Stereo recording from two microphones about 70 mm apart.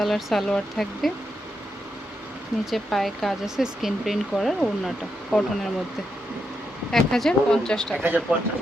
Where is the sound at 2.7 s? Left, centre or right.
Centre.